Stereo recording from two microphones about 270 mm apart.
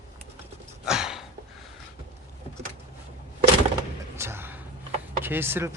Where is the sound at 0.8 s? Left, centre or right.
Centre.